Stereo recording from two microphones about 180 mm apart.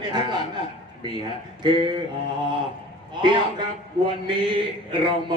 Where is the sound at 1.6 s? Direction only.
25° right (ahead or behind).